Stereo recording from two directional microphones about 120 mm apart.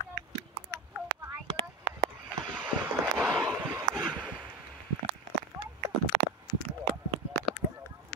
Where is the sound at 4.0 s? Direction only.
5° left (ahead or behind).